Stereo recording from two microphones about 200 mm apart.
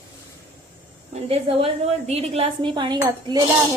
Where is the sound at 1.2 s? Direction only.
30° right (ahead or behind).